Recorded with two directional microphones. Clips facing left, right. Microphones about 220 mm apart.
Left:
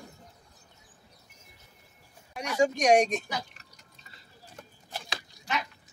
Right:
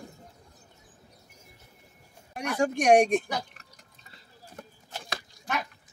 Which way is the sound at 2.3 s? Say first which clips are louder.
Left 1 dB; 55° right (ahead or behind).